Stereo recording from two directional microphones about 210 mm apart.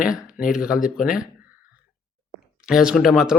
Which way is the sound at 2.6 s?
5° right (ahead or behind).